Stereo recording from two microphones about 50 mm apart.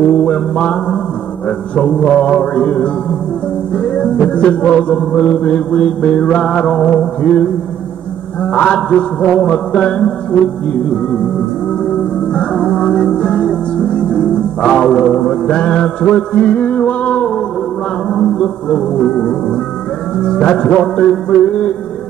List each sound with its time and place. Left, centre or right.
0.2 s mantra: left
1.8 s music: left
12.4 s music: left
18.4 s music: centre